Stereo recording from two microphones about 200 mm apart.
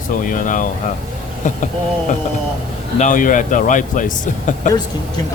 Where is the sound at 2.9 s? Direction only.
40° left (ahead or behind).